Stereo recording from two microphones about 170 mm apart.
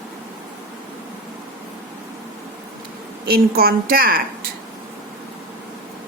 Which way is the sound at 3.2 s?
60° right (ahead or behind).